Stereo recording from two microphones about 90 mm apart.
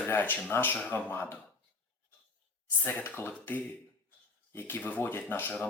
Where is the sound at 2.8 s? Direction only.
20° left (ahead or behind).